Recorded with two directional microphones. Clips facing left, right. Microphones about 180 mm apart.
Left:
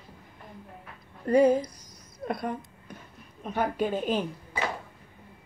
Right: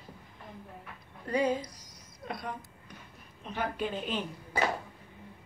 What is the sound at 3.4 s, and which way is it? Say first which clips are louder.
Speech: left 6 dB; 45° left (ahead or behind).